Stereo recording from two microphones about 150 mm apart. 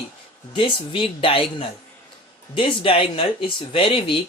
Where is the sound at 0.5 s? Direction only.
35° left (ahead or behind).